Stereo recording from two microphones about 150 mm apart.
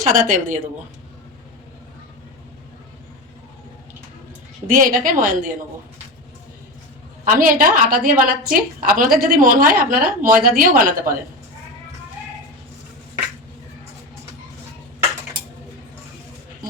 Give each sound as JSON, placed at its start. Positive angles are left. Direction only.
{"t": 0.0, "sound": "a woman's voice", "side_deg": -60}
{"t": 4.6, "sound": "a woman's voice", "side_deg": -65}
{"t": 7.3, "sound": "a woman's voice", "side_deg": -65}